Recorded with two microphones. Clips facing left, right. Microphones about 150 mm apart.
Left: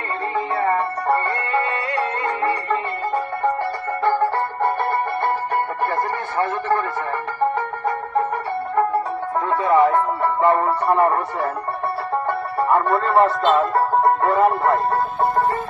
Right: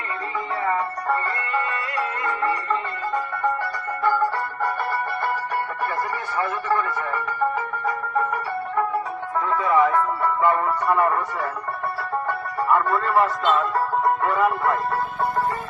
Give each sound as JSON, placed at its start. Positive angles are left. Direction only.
{"t": 6.3, "sound": "a sound", "side_deg": 50}
{"t": 8.2, "sound": "music", "side_deg": 45}
{"t": 9.5, "sound": "speech", "side_deg": 30}
{"t": 12.1, "sound": "music", "side_deg": 30}
{"t": 14.0, "sound": "music", "side_deg": 45}